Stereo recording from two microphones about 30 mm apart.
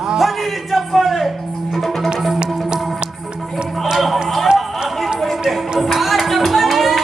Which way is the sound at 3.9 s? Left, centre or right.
Centre.